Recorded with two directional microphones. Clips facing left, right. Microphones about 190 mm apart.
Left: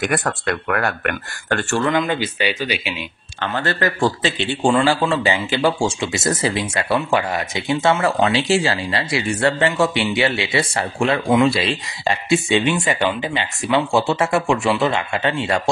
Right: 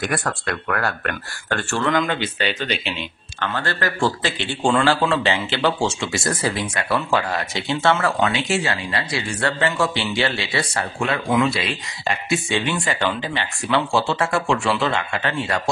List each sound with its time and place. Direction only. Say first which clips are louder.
0.2 s speech: left 3 dB; 20° left (ahead or behind)
1.9 s speech: right 2 dB; 5° left (ahead or behind)
3.4 s speech: left 3 dB; 20° left (ahead or behind)
4.6 s speech: left 1 dB; 10° left (ahead or behind)
15.1 s speech: left 3 dB; 25° left (ahead or behind)